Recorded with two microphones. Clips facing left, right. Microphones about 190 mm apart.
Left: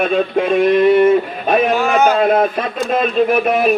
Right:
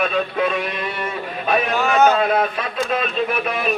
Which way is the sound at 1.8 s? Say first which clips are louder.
Left 2 dB; 10° left (ahead or behind).